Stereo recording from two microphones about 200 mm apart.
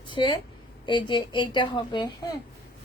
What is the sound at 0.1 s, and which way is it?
A woman's voice, 25° left (ahead or behind).